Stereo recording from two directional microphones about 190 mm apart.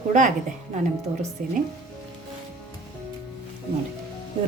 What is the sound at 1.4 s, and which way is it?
Speech, 40° right (ahead or behind).